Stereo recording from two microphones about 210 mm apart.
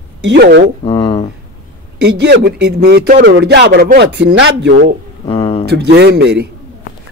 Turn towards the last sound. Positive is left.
turn(degrees=-50)  # may be behind; listen again after turning